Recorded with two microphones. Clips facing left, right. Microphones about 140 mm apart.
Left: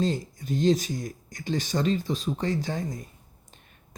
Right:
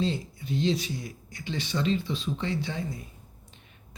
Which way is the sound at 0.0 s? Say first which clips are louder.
Left 2 dB; 45° left (ahead or behind).